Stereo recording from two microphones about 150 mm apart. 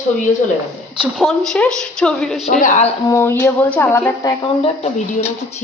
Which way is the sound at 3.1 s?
15° left (ahead or behind).